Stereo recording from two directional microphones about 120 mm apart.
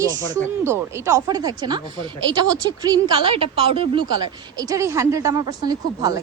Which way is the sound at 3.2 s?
50° right (ahead or behind).